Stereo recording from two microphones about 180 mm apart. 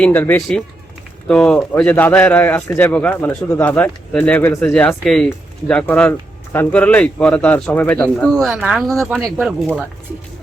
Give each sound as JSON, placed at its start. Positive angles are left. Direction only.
{"t": 0.0, "sound": "speech", "side_deg": 10}